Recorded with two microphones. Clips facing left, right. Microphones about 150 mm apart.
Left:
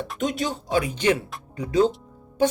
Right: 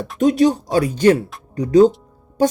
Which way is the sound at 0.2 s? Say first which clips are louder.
Right 13 dB; 35° right (ahead or behind).